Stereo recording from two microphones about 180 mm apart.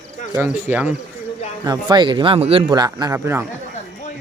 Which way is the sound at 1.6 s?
20° right (ahead or behind).